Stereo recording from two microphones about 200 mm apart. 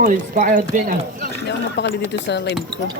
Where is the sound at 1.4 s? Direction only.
60° left (ahead or behind).